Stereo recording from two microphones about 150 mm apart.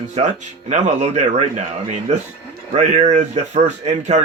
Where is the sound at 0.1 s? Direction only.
50° right (ahead or behind).